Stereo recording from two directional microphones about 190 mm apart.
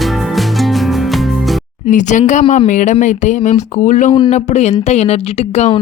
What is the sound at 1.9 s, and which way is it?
Speech, 40° left (ahead or behind).